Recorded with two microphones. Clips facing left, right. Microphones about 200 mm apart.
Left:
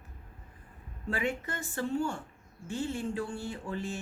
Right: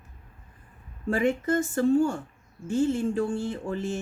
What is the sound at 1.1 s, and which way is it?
Speech, 45° right (ahead or behind).